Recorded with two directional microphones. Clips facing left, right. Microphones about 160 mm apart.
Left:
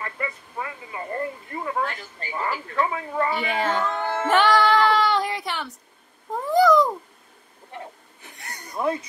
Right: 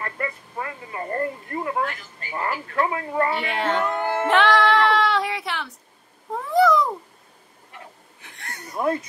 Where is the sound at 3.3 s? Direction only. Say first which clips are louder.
Even; centre (ahead or behind).